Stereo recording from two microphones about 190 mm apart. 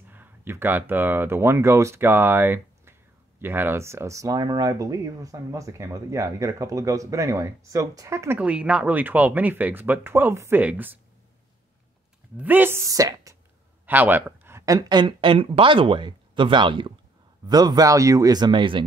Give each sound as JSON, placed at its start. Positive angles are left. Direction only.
{"t": 0.1, "sound": "speech", "side_deg": -10}
{"t": 12.4, "sound": "speech", "side_deg": -10}